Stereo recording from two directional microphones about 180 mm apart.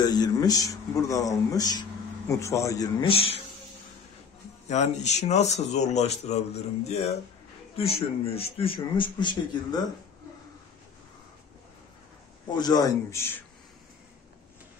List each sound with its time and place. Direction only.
0.0 s speech: 20° left (ahead or behind)
4.6 s speech: 40° left (ahead or behind)
12.5 s speech: 20° left (ahead or behind)